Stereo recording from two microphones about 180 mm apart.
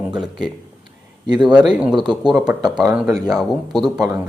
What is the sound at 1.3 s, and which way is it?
Speech, 25° right (ahead or behind).